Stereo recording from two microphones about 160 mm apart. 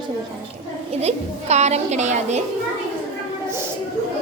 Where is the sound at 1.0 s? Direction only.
45° right (ahead or behind).